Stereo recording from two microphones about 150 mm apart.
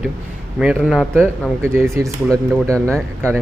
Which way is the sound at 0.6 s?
5° right (ahead or behind).